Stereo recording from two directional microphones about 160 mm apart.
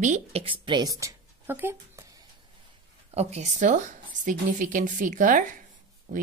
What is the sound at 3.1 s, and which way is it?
A woman's voice, 40° right (ahead or behind).